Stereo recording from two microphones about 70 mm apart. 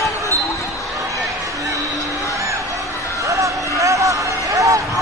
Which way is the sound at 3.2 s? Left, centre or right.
Right.